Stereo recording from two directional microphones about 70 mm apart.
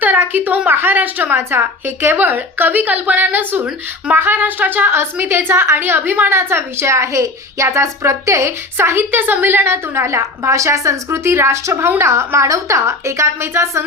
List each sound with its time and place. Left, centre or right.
0.0 s a woman's voice: right
6.3 s a woman's voice: right